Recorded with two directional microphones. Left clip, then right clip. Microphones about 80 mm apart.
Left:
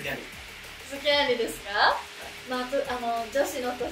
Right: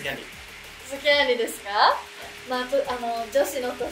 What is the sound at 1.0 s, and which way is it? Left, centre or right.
Speech, right.